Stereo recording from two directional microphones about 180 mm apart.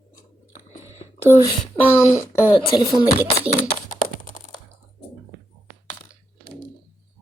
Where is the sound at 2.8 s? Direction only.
20° left (ahead or behind).